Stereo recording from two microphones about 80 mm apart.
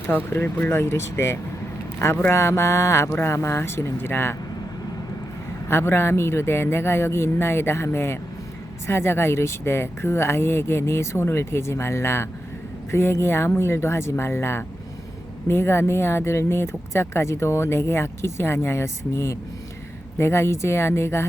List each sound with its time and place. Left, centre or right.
0.1 s speech: left
5.6 s speech: left